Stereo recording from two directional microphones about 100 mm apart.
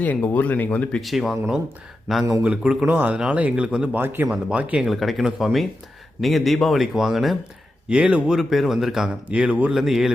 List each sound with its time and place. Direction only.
0.0 s speech: 15° left (ahead or behind)
1.0 s speech: centre (ahead or behind)
2.4 s speech: 15° right (ahead or behind)
4.9 s speech: centre (ahead or behind)
9.7 s speech: 5° right (ahead or behind)